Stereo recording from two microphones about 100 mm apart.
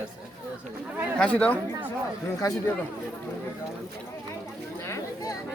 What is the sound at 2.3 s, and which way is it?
Speech, 35° left (ahead or behind).